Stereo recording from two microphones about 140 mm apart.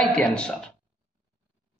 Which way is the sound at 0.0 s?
5° left (ahead or behind).